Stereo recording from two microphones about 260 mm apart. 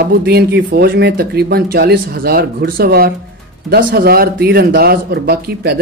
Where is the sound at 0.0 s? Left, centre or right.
Right.